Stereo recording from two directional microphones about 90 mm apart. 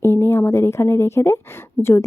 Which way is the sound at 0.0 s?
30° left (ahead or behind).